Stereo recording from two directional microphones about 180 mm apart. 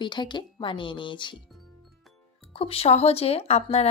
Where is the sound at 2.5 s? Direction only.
30° left (ahead or behind).